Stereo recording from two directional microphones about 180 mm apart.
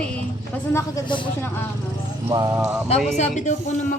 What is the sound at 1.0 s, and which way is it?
Speech, 25° left (ahead or behind).